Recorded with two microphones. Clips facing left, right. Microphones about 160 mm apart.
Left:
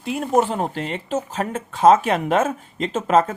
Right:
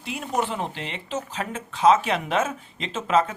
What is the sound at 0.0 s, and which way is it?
Speech, 45° left (ahead or behind).